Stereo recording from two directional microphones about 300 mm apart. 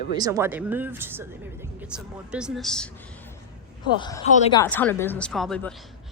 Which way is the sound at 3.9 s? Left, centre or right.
Centre.